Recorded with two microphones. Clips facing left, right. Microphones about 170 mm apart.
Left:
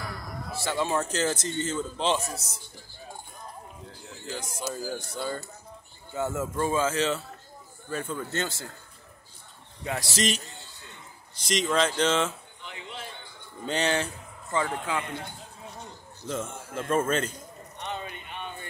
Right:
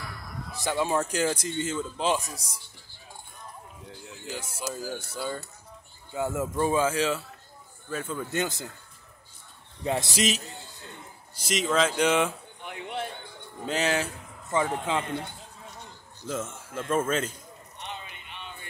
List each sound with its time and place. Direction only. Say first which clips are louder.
0.6 s a man's voice: right 1 dB; 15° right (ahead or behind)
4.3 s a man's voice: left 1 dB; 10° right (ahead or behind)
8.3 s a man's voice: right 2 dB; 15° right (ahead or behind)
10.1 s a man's voice: right 1 dB; 5° right (ahead or behind)
12.6 s a sound: right 6 dB; 60° right (ahead or behind)
13.7 s speech: even; 5° right (ahead or behind)
14.5 s speech: right 2 dB; 20° right (ahead or behind)
16.3 s speech: even; 5° right (ahead or behind)
17.7 s a sound: left 5 dB; 45° left (ahead or behind)